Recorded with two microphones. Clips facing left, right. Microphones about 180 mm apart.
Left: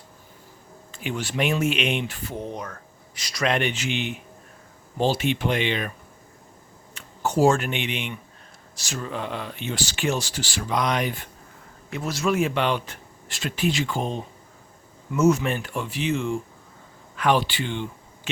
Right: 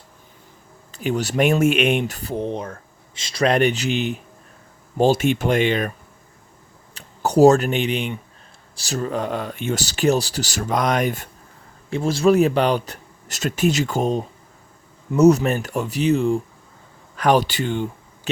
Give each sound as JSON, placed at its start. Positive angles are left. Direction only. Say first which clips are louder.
{"t": 0.9, "sound": "speech", "louder": "right 7 dB", "side_deg": -40}
{"t": 3.4, "sound": "speech", "louder": "right 6 dB", "side_deg": -40}
{"t": 6.9, "sound": "speech", "louder": "right 6 dB", "side_deg": -40}
{"t": 11.9, "sound": "speech", "louder": "right 8 dB", "side_deg": -30}